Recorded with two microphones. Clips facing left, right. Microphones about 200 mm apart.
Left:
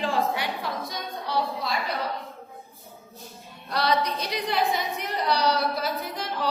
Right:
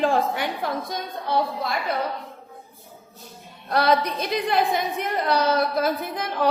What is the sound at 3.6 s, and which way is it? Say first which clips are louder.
A woman's voice: right 4 dB; 50° right (ahead or behind).